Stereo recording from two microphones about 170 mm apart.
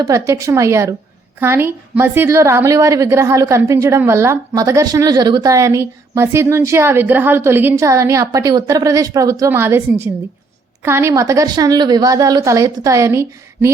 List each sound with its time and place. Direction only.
0.0 s a woman's voice: 20° right (ahead or behind)